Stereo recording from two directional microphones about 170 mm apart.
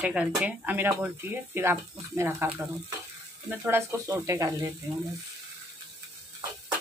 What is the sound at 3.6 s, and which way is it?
Speech, 15° right (ahead or behind).